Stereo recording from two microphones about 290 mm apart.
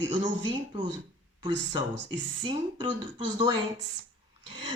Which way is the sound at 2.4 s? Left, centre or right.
Centre.